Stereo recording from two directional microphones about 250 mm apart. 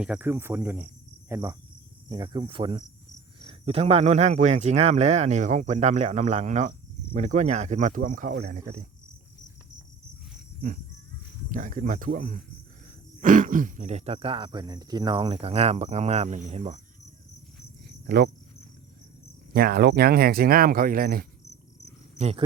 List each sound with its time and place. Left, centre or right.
0.0 s a man's voice: centre; by 8.8 s right
11.4 s a man's voice: right
18.0 s speech: right
19.5 s speech: right
22.2 s a man's voice: right